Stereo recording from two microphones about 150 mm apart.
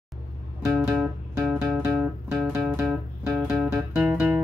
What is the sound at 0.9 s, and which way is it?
Music, 5° right (ahead or behind).